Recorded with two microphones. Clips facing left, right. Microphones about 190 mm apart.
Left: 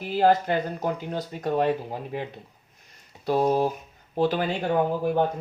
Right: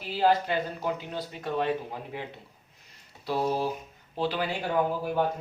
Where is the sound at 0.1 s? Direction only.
45° left (ahead or behind).